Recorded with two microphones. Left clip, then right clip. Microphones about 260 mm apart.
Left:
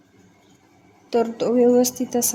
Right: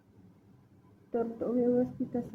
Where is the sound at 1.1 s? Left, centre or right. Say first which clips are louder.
Left 12 dB; left.